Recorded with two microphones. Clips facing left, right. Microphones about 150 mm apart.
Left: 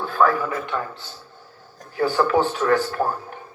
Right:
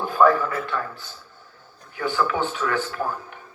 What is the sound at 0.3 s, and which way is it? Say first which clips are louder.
Speech: left 1 dB; 15° left (ahead or behind).